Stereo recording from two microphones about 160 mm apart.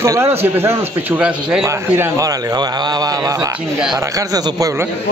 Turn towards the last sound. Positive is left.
turn(degrees=-20)  # may be behind; listen again after turning